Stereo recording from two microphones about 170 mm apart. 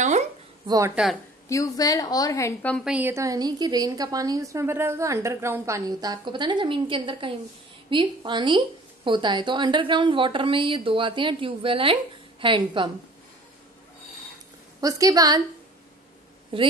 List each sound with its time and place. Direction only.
0.7 s a woman's voice: 20° right (ahead or behind)
1.5 s a woman's voice: 20° left (ahead or behind)
2.8 s a woman's voice: 10° right (ahead or behind); by 12.9 s 25° right (ahead or behind)
14.8 s a woman's voice: 20° right (ahead or behind)